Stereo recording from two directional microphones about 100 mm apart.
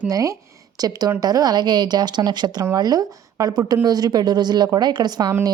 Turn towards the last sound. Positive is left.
turn(degrees=-45)  # may be behind; listen again after turning